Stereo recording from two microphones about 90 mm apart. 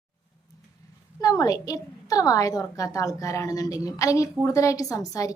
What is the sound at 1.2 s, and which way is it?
A woman's voice, 40° left (ahead or behind).